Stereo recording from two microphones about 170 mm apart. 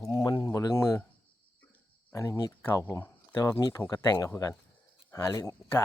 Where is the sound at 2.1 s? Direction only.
20° left (ahead or behind).